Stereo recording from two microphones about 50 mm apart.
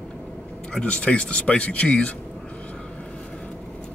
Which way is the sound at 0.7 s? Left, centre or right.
Centre.